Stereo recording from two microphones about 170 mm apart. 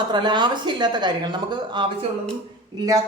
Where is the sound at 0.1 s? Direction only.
25° right (ahead or behind).